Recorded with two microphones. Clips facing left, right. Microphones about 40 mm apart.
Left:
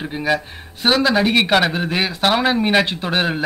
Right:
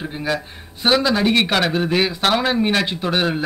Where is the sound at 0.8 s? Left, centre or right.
Centre.